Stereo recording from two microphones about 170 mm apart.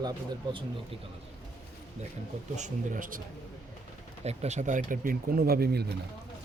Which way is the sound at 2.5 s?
50° right (ahead or behind).